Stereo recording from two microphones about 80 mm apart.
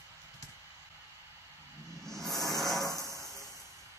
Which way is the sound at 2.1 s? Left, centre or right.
Centre.